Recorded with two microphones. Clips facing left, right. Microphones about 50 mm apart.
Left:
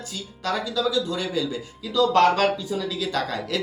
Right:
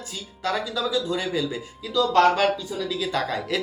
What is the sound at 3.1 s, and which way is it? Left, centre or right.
Speech, centre.